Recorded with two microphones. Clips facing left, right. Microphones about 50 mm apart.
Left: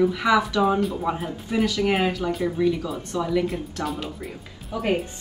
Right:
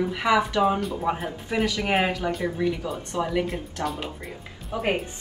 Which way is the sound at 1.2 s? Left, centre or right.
Right.